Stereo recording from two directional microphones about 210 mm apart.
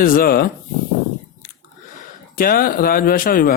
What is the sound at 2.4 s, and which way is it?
Speech, 45° left (ahead or behind).